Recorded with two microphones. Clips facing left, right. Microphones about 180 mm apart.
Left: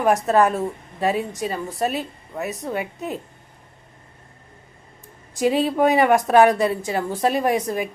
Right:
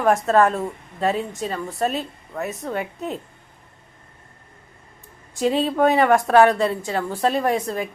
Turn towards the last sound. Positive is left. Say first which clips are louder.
# left 1 dB
turn(degrees=15)  # may be behind; listen again after turning